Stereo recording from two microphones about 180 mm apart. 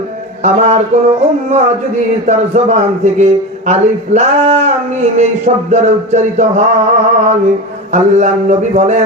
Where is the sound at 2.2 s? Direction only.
40° right (ahead or behind).